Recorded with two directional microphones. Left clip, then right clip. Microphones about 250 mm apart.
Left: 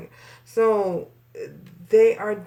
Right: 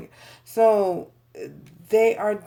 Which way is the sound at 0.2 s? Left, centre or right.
Right.